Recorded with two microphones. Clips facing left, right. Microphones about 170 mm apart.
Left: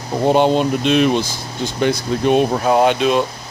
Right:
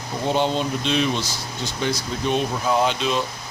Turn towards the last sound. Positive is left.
turn(degrees=55)  # may be behind; listen again after turning